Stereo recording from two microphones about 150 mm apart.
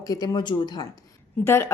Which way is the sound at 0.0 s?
25° left (ahead or behind).